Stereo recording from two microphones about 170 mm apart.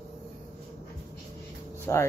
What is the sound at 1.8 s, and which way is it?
Speech, 15° left (ahead or behind).